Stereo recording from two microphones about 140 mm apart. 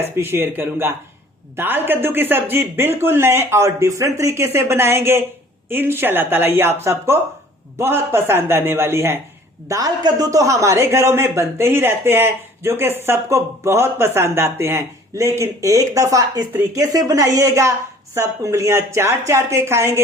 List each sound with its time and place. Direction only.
0.2 s a man's voice: 15° right (ahead or behind)